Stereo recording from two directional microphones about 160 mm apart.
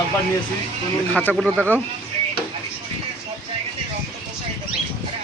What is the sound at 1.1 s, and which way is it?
Speech, 10° left (ahead or behind).